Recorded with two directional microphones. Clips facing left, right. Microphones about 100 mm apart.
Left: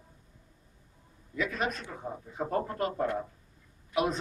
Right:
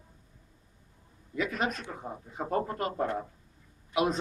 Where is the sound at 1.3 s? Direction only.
20° right (ahead or behind).